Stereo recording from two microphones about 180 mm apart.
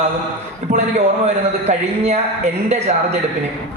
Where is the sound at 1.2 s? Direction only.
40° right (ahead or behind).